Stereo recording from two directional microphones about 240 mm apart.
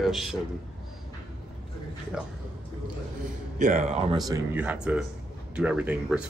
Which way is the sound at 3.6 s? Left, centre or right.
Right.